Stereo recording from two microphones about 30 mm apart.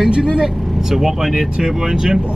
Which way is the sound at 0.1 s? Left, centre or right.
Right.